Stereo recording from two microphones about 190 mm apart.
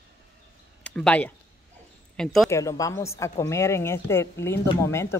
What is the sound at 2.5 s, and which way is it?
A woman's voice, 15° left (ahead or behind).